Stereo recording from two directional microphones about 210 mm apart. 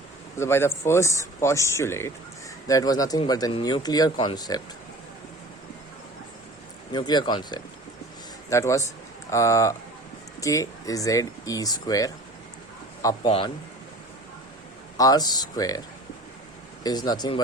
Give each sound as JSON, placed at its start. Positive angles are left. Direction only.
{"t": 0.3, "sound": "speech", "side_deg": 10}
{"t": 6.9, "sound": "speech", "side_deg": 20}
{"t": 14.9, "sound": "speech", "side_deg": 20}
{"t": 16.8, "sound": "speech", "side_deg": 20}